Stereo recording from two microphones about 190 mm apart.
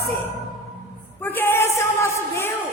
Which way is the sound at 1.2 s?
10° left (ahead or behind).